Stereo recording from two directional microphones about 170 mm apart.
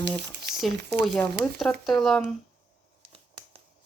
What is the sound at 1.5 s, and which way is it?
Speech, centre (ahead or behind).